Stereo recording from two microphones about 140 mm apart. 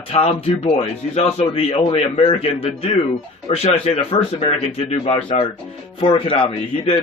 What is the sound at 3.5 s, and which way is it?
A man's voice, 50° left (ahead or behind).